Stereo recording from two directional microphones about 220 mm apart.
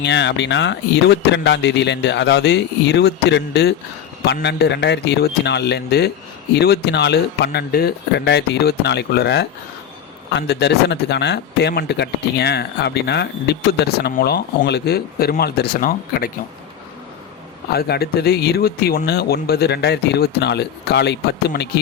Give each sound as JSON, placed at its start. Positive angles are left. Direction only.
{"t": 0.0, "sound": "speech", "side_deg": 50}
{"t": 17.7, "sound": "speech", "side_deg": 45}